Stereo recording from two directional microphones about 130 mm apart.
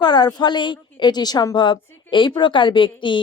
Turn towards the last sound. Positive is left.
turn(degrees=40)  # may be behind; listen again after turning